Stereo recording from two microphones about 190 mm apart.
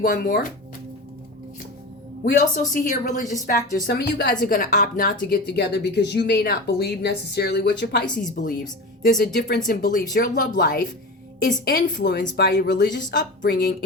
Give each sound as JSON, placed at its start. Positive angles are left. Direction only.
{"t": 0.0, "sound": "speech", "side_deg": 45}
{"t": 2.2, "sound": "speech", "side_deg": 45}
{"t": 3.4, "sound": "speech", "side_deg": 50}
{"t": 4.4, "sound": "speech", "side_deg": 45}
{"t": 5.3, "sound": "speech", "side_deg": 60}
{"t": 8.0, "sound": "a woman's voice", "side_deg": 5}
{"t": 8.4, "sound": "speech", "side_deg": 50}
{"t": 11.6, "sound": "speech", "side_deg": 55}
{"t": 13.1, "sound": "speech", "side_deg": 45}